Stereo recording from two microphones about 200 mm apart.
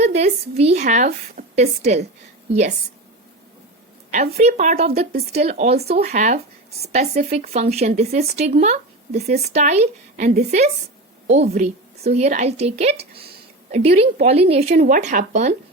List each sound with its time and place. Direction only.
0.0 s speech: 35° right (ahead or behind)
4.1 s speech: 35° right (ahead or behind)